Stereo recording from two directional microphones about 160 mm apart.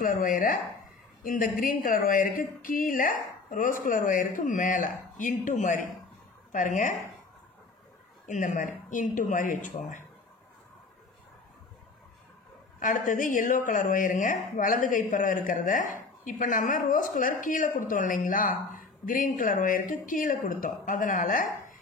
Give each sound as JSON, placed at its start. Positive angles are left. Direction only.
{"t": 0.0, "sound": "speech", "side_deg": 60}
{"t": 8.3, "sound": "speech", "side_deg": 55}
{"t": 12.7, "sound": "speech", "side_deg": 55}